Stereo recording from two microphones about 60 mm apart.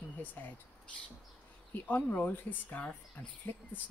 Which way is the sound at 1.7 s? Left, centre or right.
Left.